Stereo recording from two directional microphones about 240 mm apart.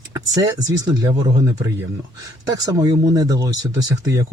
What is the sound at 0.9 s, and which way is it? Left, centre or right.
Speech, centre.